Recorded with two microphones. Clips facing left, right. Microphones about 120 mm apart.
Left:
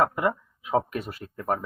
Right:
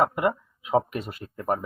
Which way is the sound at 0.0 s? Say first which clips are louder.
Right 1 dB; 20° right (ahead or behind).